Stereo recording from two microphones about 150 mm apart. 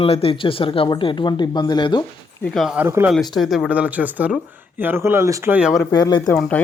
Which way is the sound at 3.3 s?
Centre (ahead or behind).